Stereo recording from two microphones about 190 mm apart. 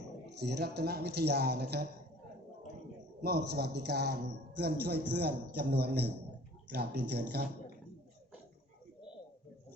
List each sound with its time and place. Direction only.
0.3 s a man's voice: 60° right (ahead or behind)
3.2 s a man's voice: 60° right (ahead or behind)